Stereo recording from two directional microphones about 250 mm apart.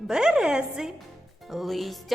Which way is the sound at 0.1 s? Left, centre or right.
Centre.